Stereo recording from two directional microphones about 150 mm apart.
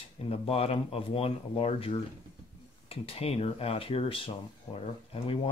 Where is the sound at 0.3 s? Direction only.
40° left (ahead or behind).